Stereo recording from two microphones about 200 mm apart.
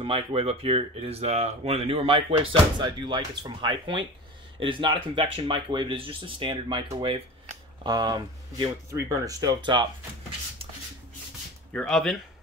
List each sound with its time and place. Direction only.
0.0 s speech: 30° right (ahead or behind)
11.7 s speech: 5° left (ahead or behind)